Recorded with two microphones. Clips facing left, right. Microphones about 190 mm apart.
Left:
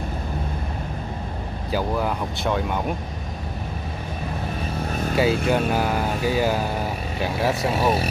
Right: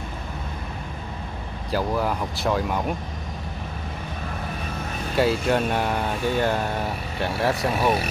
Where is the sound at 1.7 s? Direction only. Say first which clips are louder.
Even; centre (ahead or behind).